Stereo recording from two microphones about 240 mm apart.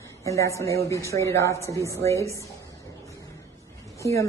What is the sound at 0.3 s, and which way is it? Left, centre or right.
Speech, centre.